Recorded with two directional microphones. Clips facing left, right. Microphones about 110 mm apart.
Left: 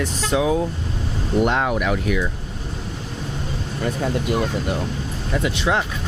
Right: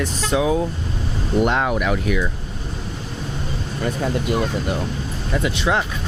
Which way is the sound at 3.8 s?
15° right (ahead or behind).